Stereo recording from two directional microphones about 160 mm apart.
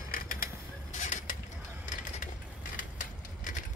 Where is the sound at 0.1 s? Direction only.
60° left (ahead or behind).